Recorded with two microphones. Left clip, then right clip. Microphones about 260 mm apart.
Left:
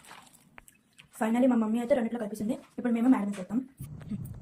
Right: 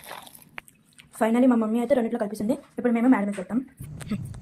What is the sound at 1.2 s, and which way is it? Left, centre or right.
Speech, centre.